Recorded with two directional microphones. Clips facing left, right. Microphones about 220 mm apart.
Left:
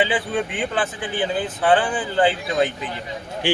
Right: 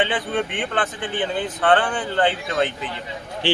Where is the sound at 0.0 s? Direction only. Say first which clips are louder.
Left 1 dB; 5° left (ahead or behind).